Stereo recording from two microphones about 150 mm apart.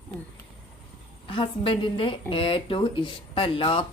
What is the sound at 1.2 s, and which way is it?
A woman's voice, 35° left (ahead or behind).